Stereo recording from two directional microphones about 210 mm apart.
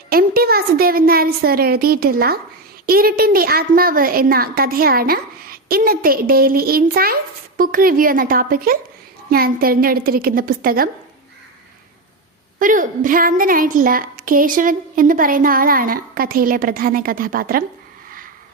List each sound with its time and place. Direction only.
0.1 s a woman's voice: 45° right (ahead or behind)
12.5 s a woman's voice: 40° right (ahead or behind)